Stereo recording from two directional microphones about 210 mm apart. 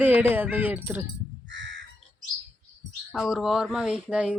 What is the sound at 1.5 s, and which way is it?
Crow, 60° right (ahead or behind).